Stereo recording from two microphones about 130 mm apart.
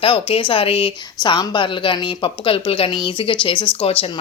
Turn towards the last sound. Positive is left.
turn(degrees=50)  # may be behind; listen again after turning